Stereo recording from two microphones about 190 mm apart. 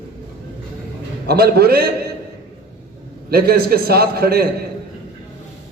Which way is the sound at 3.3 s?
55° right (ahead or behind).